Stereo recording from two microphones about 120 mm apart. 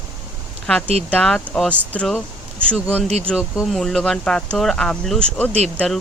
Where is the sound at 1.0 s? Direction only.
10° left (ahead or behind).